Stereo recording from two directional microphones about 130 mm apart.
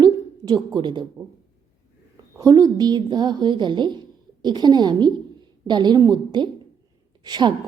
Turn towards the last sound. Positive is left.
turn(degrees=-35)  # may be behind; listen again after turning